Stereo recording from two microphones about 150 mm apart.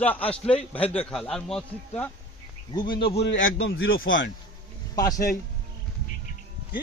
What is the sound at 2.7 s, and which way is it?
Speech, 30° left (ahead or behind).